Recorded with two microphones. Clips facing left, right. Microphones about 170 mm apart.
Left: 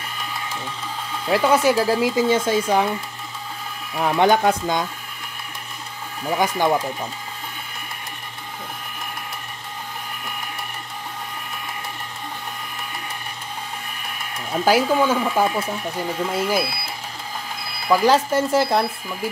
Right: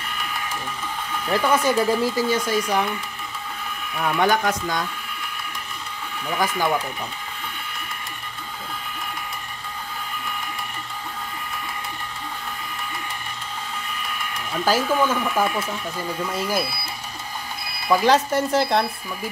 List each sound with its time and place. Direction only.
1.5 s speech: 10° left (ahead or behind)
2.2 s speech: 25° left (ahead or behind)
3.9 s speech: 25° left (ahead or behind)
6.2 s speech: 20° left (ahead or behind)
14.7 s speech: 15° left (ahead or behind)
16.3 s speech: 5° left (ahead or behind)
18.0 s speech: centre (ahead or behind)